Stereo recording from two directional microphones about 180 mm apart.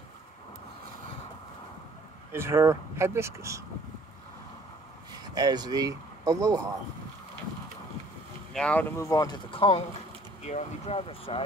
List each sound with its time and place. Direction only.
2.3 s speech: 15° right (ahead or behind)
5.3 s speech: 20° right (ahead or behind)
8.5 s speech: 5° left (ahead or behind)
8.9 s speech: 15° left (ahead or behind)